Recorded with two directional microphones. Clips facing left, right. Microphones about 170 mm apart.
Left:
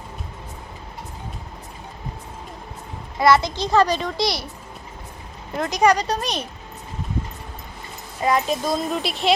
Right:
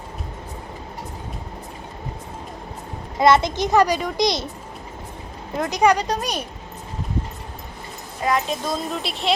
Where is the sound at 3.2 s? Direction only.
20° right (ahead or behind).